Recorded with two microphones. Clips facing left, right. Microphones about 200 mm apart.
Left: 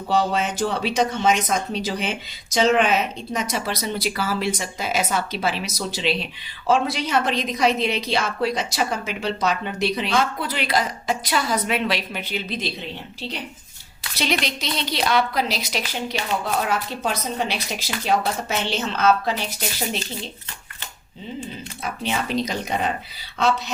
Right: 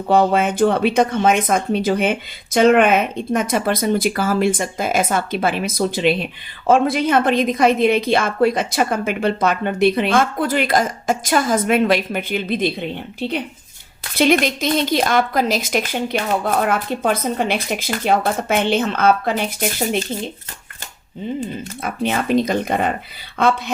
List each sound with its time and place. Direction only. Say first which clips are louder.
0.1 s a woman's voice: right 6 dB; 55° right (ahead or behind)
21.8 s a woman's voice: right 6 dB; 55° right (ahead or behind)